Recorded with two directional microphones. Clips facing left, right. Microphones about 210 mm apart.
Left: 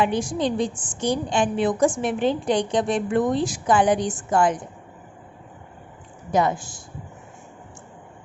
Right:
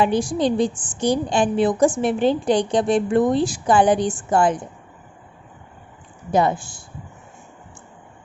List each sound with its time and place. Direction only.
0.0 s a woman's voice: 35° right (ahead or behind)
6.3 s speech: 30° right (ahead or behind)